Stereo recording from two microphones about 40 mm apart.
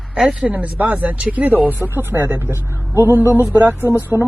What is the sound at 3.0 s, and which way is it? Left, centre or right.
Speech, right.